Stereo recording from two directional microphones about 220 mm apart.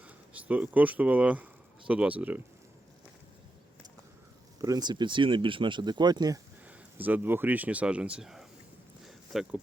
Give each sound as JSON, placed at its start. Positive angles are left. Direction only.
{"t": 0.3, "sound": "speech", "side_deg": -5}
{"t": 4.6, "sound": "speech", "side_deg": -15}
{"t": 9.0, "sound": "a sound", "side_deg": 0}